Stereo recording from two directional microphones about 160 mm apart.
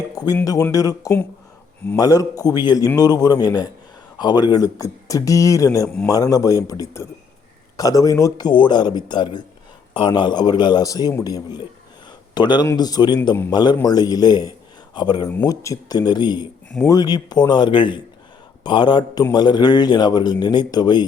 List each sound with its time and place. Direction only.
0.4 s speech: 20° left (ahead or behind)
13.3 s a man's voice: 15° left (ahead or behind)